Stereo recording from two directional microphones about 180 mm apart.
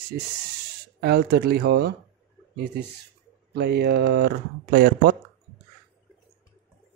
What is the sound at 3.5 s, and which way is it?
Speech, 70° right (ahead or behind).